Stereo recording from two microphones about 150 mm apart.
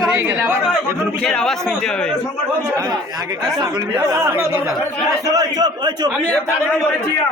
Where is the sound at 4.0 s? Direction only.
20° right (ahead or behind).